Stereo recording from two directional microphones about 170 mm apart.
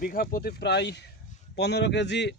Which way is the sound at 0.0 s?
55° left (ahead or behind).